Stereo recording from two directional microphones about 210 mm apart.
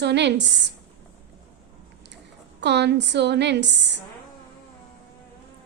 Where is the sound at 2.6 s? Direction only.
55° right (ahead or behind).